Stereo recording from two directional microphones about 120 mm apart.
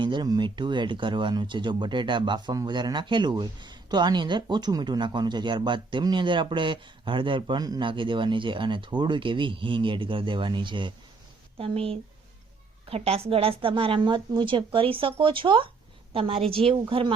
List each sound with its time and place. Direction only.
0.0 s a woman's voice: 40° right (ahead or behind)